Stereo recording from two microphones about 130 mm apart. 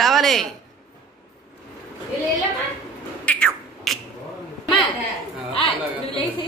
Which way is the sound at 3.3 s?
5° left (ahead or behind).